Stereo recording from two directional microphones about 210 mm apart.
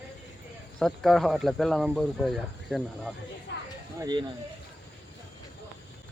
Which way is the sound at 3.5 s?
55° left (ahead or behind).